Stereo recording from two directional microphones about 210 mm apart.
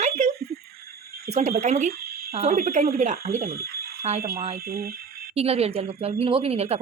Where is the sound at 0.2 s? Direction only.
40° right (ahead or behind).